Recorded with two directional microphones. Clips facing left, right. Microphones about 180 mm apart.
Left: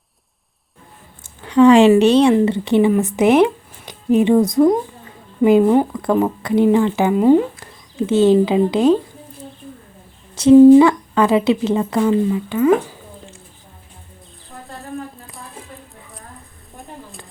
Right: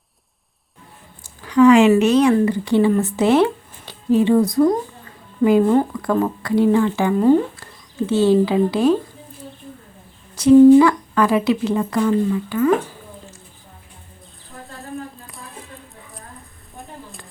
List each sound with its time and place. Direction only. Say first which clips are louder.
1.5 s speech: left 2 dB; 30° left (ahead or behind)
10.3 s speech: left 2 dB; 25° left (ahead or behind)
16.7 s a sound: left 1 dB; centre (ahead or behind)